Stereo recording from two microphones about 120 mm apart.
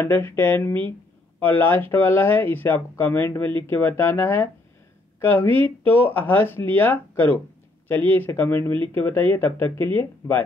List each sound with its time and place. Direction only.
0.0 s speech: 20° left (ahead or behind)